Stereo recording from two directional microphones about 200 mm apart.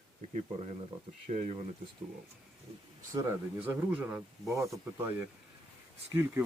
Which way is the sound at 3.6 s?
5° right (ahead or behind).